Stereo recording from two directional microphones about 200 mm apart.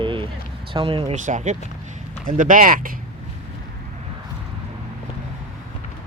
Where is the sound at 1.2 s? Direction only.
40° right (ahead or behind).